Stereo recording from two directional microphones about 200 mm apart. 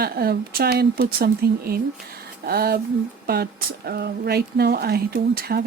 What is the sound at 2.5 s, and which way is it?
Speech, 50° right (ahead or behind).